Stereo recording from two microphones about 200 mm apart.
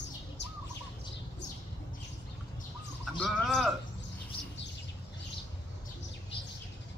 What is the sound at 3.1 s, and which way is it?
Speech, 5° left (ahead or behind).